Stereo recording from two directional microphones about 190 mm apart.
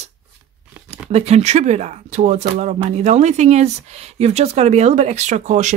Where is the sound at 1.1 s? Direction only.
35° right (ahead or behind).